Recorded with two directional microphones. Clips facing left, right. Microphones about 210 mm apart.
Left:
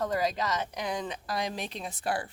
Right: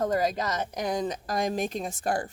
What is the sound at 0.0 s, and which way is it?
A woman's voice, 45° right (ahead or behind).